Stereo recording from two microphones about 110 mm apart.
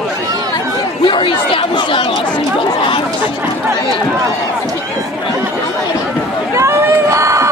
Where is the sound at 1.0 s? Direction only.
50° left (ahead or behind).